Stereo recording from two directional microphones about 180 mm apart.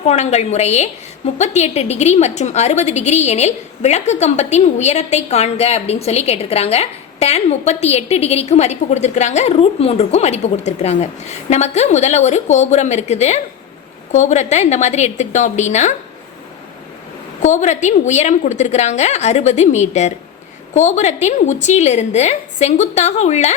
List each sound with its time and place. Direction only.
0.1 s a woman's voice: 40° left (ahead or behind)
17.4 s a woman's voice: 40° left (ahead or behind)